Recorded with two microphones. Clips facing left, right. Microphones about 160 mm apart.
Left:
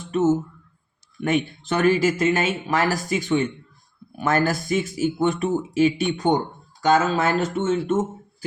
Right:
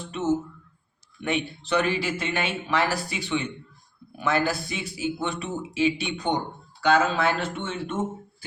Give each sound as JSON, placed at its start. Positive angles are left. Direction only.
{"t": 0.1, "sound": "speech", "side_deg": 45}